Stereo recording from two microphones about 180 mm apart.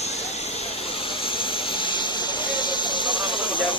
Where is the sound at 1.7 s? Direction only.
25° left (ahead or behind).